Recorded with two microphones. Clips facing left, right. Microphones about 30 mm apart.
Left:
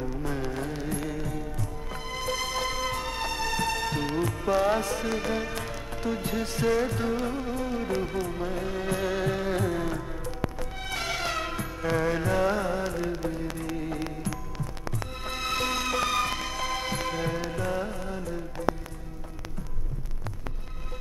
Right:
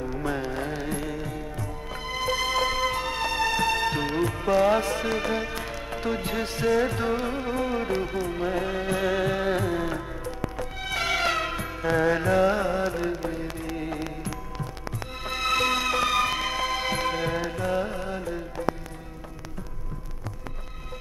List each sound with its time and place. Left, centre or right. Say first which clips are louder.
0.1 s music: right 4 dB; right
0.4 s music: right 2 dB; right
15.4 s music: right 5 dB; right